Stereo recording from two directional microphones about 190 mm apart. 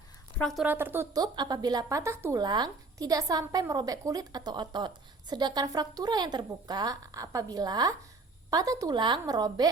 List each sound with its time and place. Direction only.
0.3 s a woman's voice: centre (ahead or behind); by 9.6 s 20° right (ahead or behind)